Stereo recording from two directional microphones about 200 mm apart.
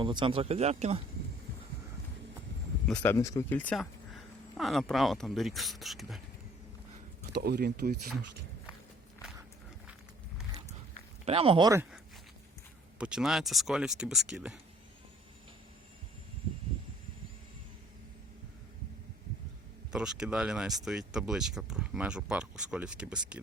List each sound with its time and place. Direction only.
0.0 s speech: 25° right (ahead or behind)
2.8 s speech: 5° left (ahead or behind)
7.3 s speech: 55° right (ahead or behind)
11.3 s speech: 25° right (ahead or behind)
13.0 s speech: 5° right (ahead or behind)
19.9 s speech: 5° right (ahead or behind)